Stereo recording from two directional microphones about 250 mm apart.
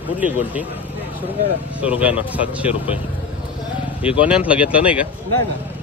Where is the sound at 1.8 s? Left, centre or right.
Centre.